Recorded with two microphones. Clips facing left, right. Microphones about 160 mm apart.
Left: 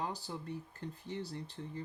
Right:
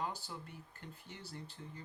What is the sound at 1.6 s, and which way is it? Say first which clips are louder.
Speech: left 6 dB; 45° left (ahead or behind).